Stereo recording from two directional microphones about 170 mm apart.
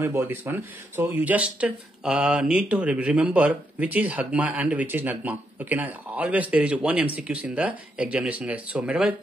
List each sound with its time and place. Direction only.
0.0 s speech: 15° right (ahead or behind)